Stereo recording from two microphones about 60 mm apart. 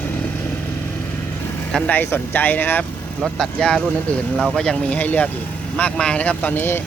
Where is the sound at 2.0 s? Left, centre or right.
Left.